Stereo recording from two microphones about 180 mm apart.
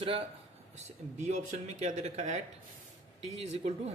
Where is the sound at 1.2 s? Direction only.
40° right (ahead or behind).